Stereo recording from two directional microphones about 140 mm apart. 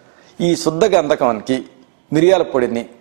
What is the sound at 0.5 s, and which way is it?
A man's voice, 10° right (ahead or behind).